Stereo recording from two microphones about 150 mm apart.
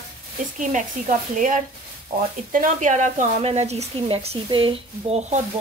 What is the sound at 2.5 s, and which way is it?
A woman's voice, 60° right (ahead or behind).